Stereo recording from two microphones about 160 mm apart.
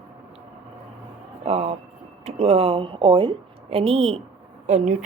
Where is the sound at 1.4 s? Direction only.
40° right (ahead or behind).